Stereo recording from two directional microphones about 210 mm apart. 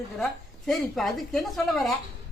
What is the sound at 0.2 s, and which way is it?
A woman's voice, centre (ahead or behind).